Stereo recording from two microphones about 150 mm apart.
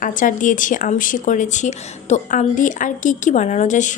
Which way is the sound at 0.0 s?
60° left (ahead or behind).